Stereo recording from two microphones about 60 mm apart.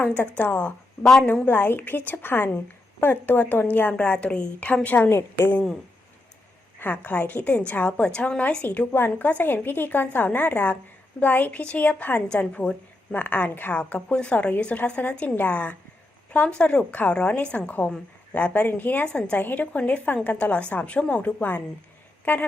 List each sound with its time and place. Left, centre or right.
0.3 s a woman's voice: left
3.9 s a woman's voice: centre
5.0 s a woman's voice: left
6.7 s a woman's voice: left
13.1 s a woman's voice: left
13.7 s a woman's voice: left